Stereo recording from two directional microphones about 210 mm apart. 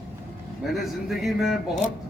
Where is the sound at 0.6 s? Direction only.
Centre (ahead or behind).